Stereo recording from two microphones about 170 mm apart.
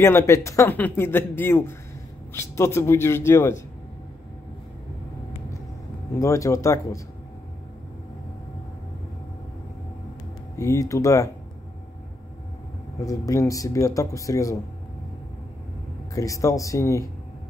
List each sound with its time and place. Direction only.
0.0 s speech: 15° left (ahead or behind)
6.1 s speech: 20° left (ahead or behind)
10.5 s speech: 20° left (ahead or behind)
13.0 s speech: 20° left (ahead or behind)
16.2 s speech: 20° left (ahead or behind)